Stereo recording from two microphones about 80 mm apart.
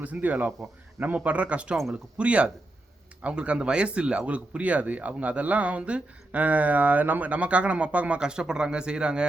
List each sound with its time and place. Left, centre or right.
0.0 s speech: right